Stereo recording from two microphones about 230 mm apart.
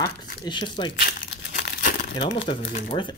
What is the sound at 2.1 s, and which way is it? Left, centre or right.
Speech, left.